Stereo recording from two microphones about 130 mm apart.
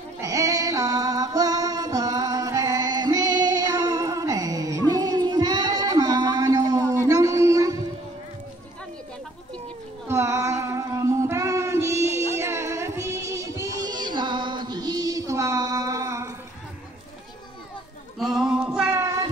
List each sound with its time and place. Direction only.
0.2 s music: 25° right (ahead or behind)
10.0 s female singing: 20° right (ahead or behind)
18.2 s a sound: centre (ahead or behind)
18.9 s child singing: 20° right (ahead or behind)